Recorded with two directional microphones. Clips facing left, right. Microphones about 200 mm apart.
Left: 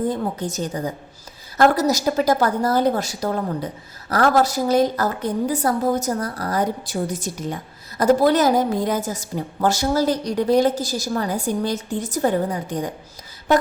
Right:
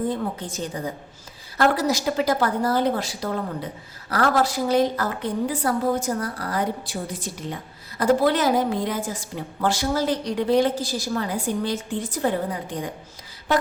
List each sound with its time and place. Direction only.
0.1 s a woman's voice: 40° left (ahead or behind)